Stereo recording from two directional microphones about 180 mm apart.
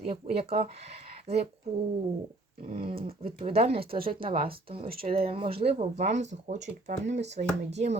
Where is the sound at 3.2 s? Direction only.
35° right (ahead or behind).